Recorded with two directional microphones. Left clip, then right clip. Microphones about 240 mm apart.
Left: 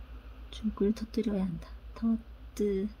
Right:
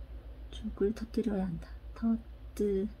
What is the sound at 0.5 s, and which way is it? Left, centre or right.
Speech, left.